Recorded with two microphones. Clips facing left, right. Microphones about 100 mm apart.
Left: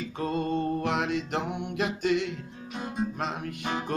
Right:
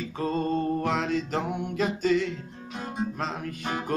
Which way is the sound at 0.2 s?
35° right (ahead or behind).